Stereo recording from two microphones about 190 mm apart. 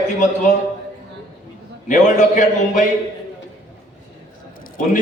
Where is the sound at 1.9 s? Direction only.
40° left (ahead or behind).